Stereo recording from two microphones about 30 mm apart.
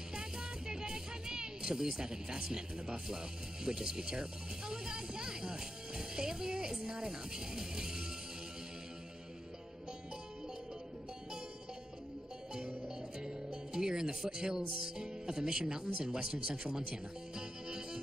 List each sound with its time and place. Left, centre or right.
0.1 s speech: right
12.5 s music: right